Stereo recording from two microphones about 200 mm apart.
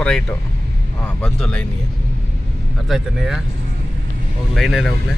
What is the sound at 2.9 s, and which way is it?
Speech, centre (ahead or behind).